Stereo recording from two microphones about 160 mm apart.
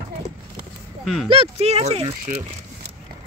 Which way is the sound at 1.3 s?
40° right (ahead or behind).